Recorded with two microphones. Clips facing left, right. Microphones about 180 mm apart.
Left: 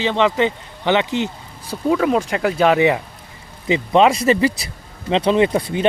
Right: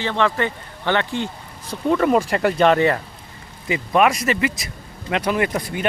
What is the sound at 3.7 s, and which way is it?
Speech, 25° left (ahead or behind).